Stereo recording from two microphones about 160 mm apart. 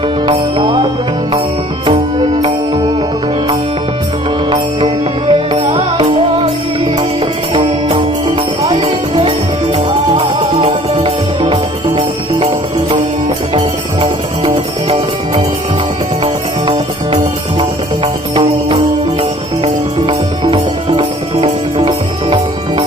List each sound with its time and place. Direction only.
0.3 s music: 30° right (ahead or behind)
1.9 s music: 35° right (ahead or behind)
5.3 s music: 35° right (ahead or behind)
7.5 s music: 35° right (ahead or behind)
14.0 s music: 35° right (ahead or behind)
16.2 s music: 35° right (ahead or behind)